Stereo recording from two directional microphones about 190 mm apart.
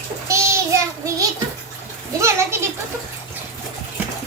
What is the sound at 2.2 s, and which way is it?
Speech, 15° right (ahead or behind).